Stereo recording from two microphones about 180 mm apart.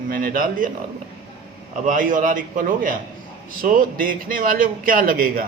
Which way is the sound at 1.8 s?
50° right (ahead or behind).